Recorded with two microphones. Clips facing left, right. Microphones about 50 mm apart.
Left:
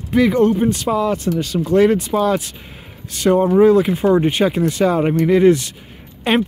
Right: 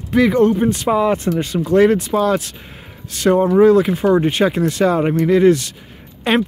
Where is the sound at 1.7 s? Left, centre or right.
Centre.